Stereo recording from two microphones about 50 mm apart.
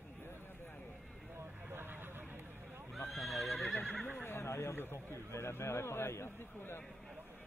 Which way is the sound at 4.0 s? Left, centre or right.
Left.